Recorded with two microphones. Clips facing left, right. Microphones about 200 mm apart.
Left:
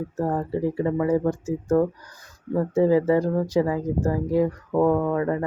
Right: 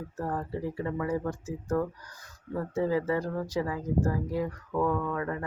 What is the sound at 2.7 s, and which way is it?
Speech, 25° left (ahead or behind).